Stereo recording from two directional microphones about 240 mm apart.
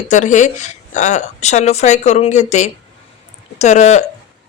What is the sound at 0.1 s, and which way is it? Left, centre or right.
Speech, left.